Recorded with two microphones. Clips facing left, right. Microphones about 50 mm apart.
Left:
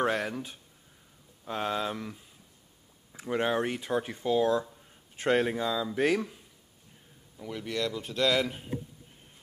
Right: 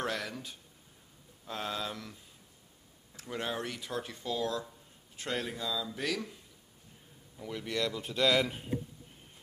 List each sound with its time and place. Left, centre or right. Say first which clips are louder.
0.0 s speech: left 7 dB; left
7.3 s speech: left 2 dB; centre